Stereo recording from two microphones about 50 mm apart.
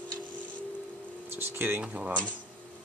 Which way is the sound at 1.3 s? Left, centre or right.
Right.